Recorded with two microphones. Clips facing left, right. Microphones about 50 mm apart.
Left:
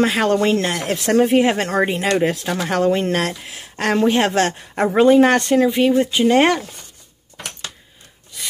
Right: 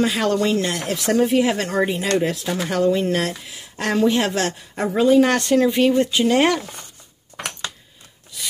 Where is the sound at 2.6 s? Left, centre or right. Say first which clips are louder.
Left 1 dB; left.